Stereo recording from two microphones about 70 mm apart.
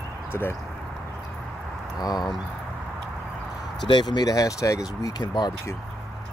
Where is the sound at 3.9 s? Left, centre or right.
Left.